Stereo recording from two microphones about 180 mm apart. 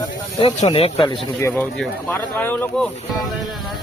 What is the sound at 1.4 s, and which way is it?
Speech, 15° left (ahead or behind).